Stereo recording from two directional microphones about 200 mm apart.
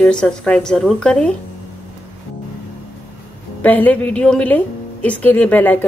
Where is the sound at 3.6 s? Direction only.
10° left (ahead or behind).